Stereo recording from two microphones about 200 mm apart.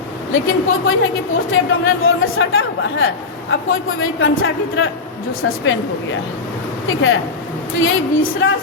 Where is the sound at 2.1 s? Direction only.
85° left.